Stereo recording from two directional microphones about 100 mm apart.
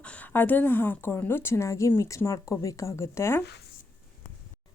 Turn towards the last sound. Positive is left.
turn(degrees=25)  # may be behind; listen again after turning